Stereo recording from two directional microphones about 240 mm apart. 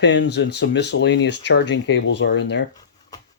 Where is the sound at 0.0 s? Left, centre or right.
Left.